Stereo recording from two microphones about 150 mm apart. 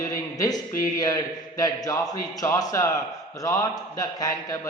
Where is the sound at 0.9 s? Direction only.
25° left (ahead or behind).